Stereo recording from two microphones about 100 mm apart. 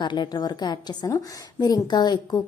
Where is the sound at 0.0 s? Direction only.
50° left (ahead or behind).